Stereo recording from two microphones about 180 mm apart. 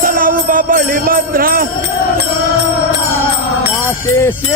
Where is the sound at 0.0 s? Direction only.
50° right (ahead or behind).